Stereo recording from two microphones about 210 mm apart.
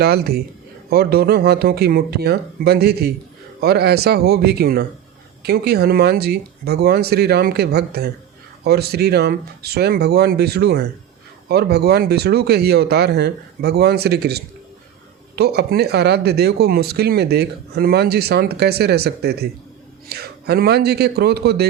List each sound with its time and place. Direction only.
0.0 s speech: 50° right (ahead or behind)